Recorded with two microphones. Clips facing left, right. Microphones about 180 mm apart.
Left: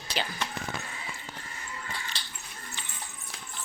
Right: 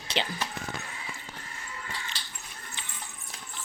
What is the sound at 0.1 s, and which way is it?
Speech, 25° right (ahead or behind).